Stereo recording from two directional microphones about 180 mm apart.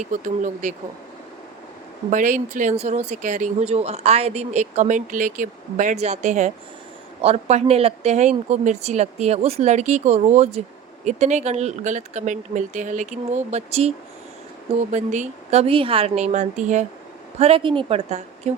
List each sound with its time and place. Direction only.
0.0 s speech: 45° right (ahead or behind)
2.0 s speech: 45° right (ahead or behind)
14.9 s speech: 40° right (ahead or behind)
17.4 s speech: 30° right (ahead or behind)